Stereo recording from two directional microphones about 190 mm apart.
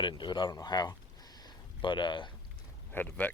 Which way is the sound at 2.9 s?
10° left (ahead or behind).